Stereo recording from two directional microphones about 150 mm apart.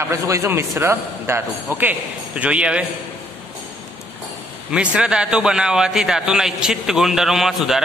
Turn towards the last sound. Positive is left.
turn(degrees=0)  # may be behind; listen again after turning